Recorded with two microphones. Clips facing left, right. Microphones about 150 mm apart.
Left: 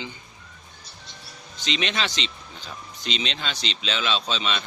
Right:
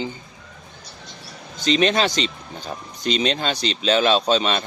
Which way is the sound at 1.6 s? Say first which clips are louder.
Right 9 dB; 40° right (ahead or behind).